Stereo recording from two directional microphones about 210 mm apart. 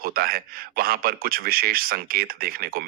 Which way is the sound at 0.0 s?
45° right (ahead or behind).